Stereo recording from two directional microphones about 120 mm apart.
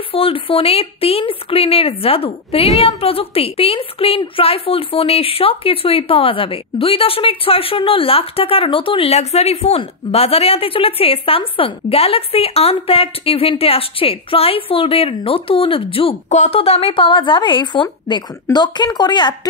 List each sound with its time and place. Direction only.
0.1 s a woman's voice: 50° left (ahead or behind)
16.3 s speech: 70° left (ahead or behind)
16.5 s a woman's voice: 55° left (ahead or behind); by 19.3 s 35° left (ahead or behind)